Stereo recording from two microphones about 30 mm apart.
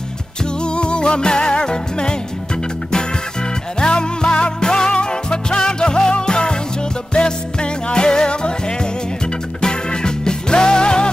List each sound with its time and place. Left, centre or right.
0.7 s music: left
3.8 s music: left
7.9 s music: left
9.6 s music: left